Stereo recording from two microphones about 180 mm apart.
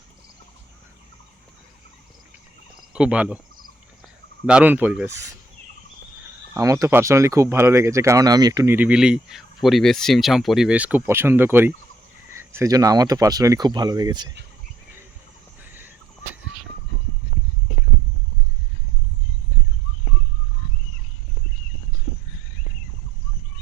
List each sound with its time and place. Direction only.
2.9 s speech: 5° right (ahead or behind)
4.4 s speech: 10° right (ahead or behind)
6.5 s speech: 15° right (ahead or behind)